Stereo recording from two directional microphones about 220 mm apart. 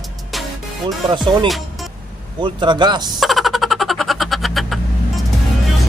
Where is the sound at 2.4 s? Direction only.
20° right (ahead or behind).